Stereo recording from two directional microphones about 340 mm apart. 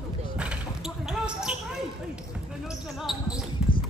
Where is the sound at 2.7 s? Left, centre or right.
Centre.